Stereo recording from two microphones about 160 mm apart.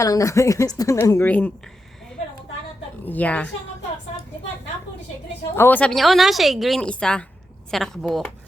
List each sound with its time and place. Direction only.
0.0 s a woman's voice: 20° left (ahead or behind)
3.0 s a woman's voice: 10° left (ahead or behind)
5.5 s a woman's voice: 10° left (ahead or behind)